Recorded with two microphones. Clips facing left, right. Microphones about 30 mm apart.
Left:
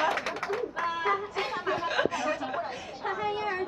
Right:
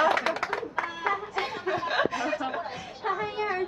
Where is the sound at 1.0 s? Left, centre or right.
Right.